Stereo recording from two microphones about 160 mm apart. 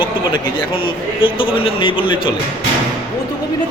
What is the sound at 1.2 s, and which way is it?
A man's voice, 35° left (ahead or behind).